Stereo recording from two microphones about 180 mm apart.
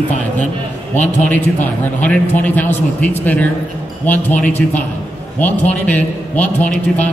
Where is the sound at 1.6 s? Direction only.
10° left (ahead or behind).